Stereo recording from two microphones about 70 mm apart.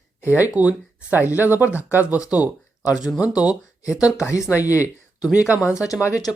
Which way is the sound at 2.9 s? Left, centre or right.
Left.